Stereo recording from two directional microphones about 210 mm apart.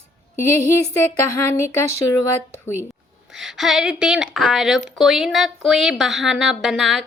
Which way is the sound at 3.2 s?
Centre (ahead or behind).